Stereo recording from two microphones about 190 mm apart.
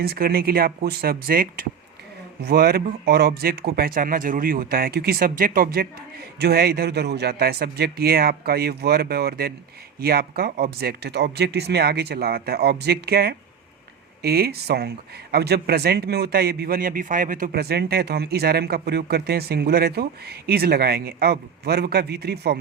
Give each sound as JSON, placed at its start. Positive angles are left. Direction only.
{"t": 0.0, "sound": "speech", "side_deg": -55}